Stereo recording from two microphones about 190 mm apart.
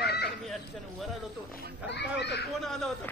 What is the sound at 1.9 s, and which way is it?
Speech, 65° left (ahead or behind).